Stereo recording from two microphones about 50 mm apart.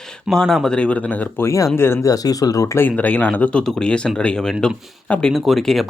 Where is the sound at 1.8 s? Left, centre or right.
Left.